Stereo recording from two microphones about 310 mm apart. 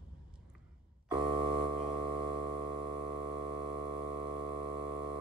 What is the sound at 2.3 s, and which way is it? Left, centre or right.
Music, centre.